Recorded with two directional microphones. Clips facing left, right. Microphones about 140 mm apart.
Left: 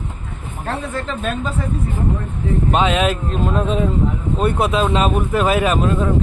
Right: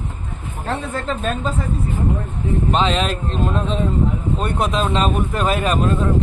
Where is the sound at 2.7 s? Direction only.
10° left (ahead or behind).